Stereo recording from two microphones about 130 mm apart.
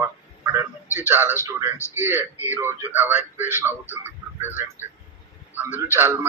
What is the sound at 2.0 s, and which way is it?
A man's voice, 15° right (ahead or behind).